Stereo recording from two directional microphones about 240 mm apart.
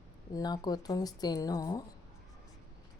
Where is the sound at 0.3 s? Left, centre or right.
Centre.